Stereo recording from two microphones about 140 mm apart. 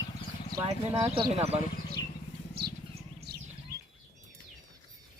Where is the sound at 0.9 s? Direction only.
45° right (ahead or behind).